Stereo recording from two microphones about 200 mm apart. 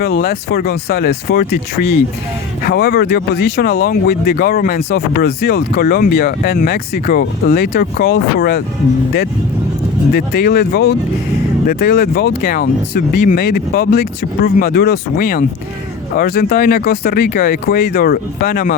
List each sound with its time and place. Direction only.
0.0 s speech: 50° left (ahead or behind)
10.1 s speech: 50° left (ahead or behind)